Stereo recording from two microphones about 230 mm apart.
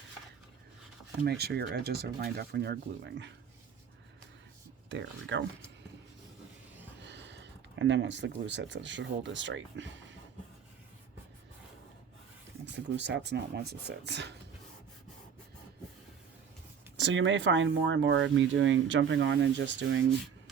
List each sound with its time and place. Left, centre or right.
1.2 s speech: right
4.9 s speech: right
7.0 s speech: right
12.7 s speech: right
17.0 s speech: right